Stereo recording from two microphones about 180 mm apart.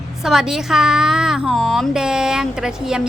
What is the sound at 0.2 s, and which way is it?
A woman's voice, centre (ahead or behind).